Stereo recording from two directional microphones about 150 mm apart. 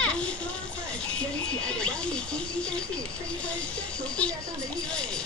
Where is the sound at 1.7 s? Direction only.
5° left (ahead or behind).